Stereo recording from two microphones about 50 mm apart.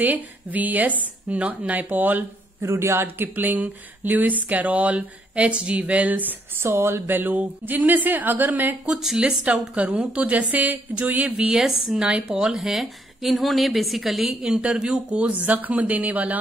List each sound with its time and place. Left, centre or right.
0.0 s speech: right
2.6 s speech: right
3.3 s speech: right
6.5 s speech: right
8.9 s a woman's voice: centre; by 11.3 s right
11.3 s a woman's voice: centre
14.4 s a woman's voice: centre
15.4 s speech: right